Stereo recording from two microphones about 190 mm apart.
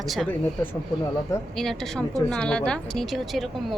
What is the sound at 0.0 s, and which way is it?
Speech, centre (ahead or behind).